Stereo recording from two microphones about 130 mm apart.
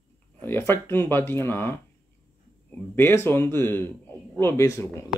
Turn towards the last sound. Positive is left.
turn(degrees=20)  # may be behind; listen again after turning